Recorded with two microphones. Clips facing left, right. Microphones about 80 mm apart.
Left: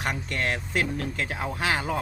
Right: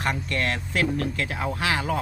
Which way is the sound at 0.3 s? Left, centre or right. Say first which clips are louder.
Right 2 dB; left.